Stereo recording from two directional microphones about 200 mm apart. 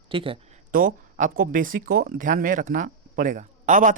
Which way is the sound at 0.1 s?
25° right (ahead or behind).